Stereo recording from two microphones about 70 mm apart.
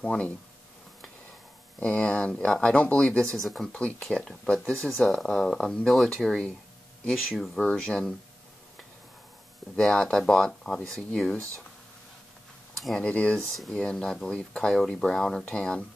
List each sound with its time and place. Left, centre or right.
0.0 s speech: centre
1.8 s speech: centre
3.3 s speech: centre
3.6 s speech: centre
5.9 s speech: centre
7.6 s speech: centre
9.8 s speech: centre
12.7 s a sound: centre
13.0 s speech: centre